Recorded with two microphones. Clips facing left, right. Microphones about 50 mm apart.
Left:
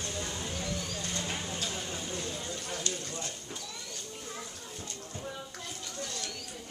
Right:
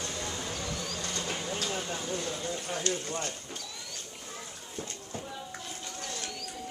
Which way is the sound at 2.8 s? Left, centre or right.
Right.